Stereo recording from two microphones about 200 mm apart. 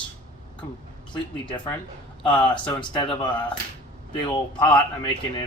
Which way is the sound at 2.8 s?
25° left (ahead or behind).